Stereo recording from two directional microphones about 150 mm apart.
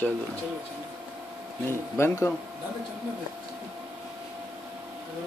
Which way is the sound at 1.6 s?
15° left (ahead or behind).